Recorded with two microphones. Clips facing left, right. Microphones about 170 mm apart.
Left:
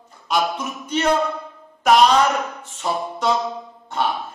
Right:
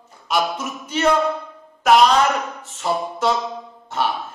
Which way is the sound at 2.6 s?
Centre (ahead or behind).